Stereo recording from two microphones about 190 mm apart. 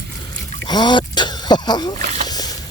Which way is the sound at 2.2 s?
20° left (ahead or behind).